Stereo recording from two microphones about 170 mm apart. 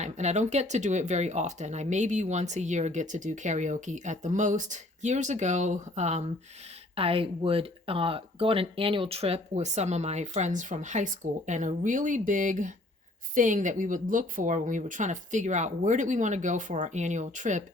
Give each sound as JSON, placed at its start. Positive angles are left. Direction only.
{"t": 0.0, "sound": "speech", "side_deg": -40}